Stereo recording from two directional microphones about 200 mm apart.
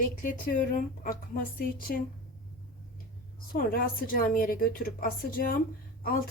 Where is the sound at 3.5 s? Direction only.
45° left (ahead or behind).